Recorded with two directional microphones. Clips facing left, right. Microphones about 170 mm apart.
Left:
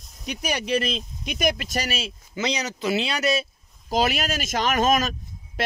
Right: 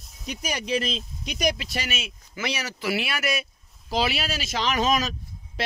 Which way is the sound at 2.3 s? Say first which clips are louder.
Left 4 dB; 20° left (ahead or behind).